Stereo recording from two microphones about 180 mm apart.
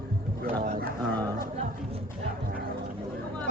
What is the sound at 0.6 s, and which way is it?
Speech, 40° right (ahead or behind).